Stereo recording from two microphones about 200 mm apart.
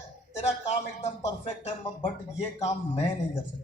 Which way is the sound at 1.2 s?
35° left (ahead or behind).